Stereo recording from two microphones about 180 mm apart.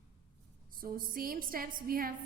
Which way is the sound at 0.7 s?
50° right (ahead or behind).